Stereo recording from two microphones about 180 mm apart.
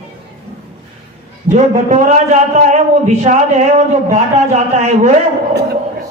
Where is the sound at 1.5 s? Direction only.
40° right (ahead or behind).